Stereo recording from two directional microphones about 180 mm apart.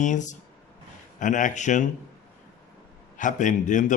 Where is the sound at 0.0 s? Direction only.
45° left (ahead or behind).